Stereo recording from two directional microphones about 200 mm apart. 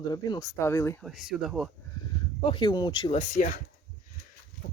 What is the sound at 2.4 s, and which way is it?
Speech, 25° left (ahead or behind).